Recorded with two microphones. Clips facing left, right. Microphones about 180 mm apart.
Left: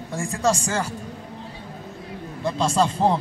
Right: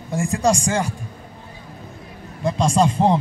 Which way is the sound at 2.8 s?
15° right (ahead or behind).